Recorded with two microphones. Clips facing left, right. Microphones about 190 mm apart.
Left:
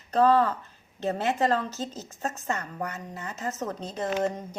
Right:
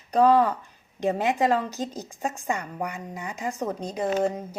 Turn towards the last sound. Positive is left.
turn(degrees=-10)  # may be behind; listen again after turning